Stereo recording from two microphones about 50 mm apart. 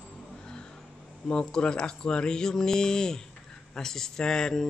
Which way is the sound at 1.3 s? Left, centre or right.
Centre.